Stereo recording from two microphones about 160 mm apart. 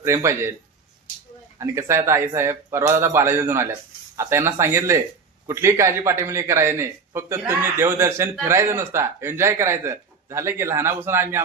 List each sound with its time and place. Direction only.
0.0 s speech: 15° right (ahead or behind)
1.5 s speech: 20° right (ahead or behind)